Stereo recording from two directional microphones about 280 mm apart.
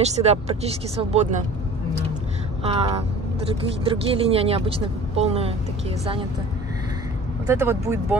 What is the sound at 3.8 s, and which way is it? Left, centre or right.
Speech, centre.